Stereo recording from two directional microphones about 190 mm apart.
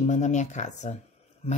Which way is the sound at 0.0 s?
40° left (ahead or behind).